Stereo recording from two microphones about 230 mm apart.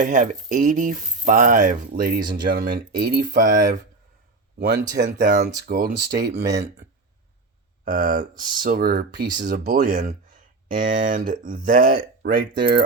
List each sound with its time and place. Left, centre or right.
0.0 s speech: right
4.9 s speech: right
7.9 s speech: right